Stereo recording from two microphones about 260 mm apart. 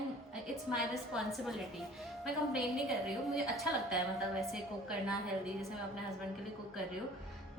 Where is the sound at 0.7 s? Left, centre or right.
Centre.